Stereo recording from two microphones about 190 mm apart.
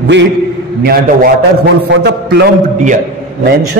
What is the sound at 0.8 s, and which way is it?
A man's voice, 50° right (ahead or behind).